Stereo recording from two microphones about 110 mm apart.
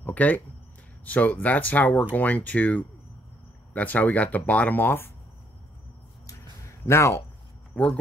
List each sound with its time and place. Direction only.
0.0 s a sound: 15° left (ahead or behind)
1.0 s speech: 15° left (ahead or behind)
6.9 s speech: 25° left (ahead or behind)